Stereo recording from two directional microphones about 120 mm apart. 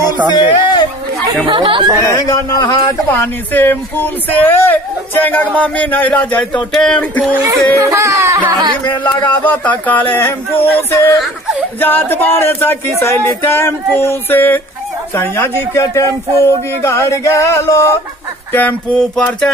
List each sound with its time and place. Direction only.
0.3 s speech: 35° left (ahead or behind)
1.2 s speech: 40° right (ahead or behind)
2.0 s a sound: 25° left (ahead or behind)
3.1 s speech: 15° left (ahead or behind)
7.8 s a sound: 25° right (ahead or behind)
8.8 s speech: 40° left (ahead or behind)
9.2 s speech: 15° left (ahead or behind)
11.8 s a sound: 15° left (ahead or behind)
18.5 s speech: 15° left (ahead or behind)